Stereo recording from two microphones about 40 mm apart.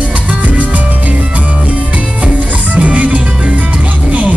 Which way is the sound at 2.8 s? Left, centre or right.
Right.